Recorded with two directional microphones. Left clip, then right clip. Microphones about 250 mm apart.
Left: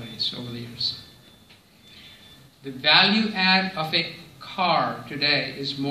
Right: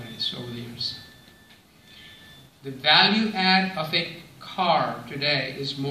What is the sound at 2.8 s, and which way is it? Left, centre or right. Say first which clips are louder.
Speech: even; left.